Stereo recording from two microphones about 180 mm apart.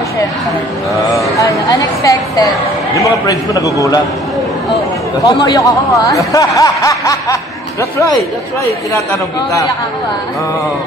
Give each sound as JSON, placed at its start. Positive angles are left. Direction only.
{"t": 1.4, "sound": "speech", "side_deg": 20}
{"t": 5.2, "sound": "speech", "side_deg": 20}